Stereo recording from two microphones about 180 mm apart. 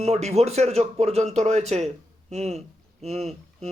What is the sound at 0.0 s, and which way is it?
A man's voice, 35° right (ahead or behind).